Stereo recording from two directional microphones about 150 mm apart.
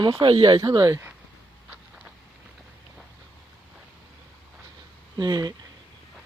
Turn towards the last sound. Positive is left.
turn(degrees=-25)  # may be behind; listen again after turning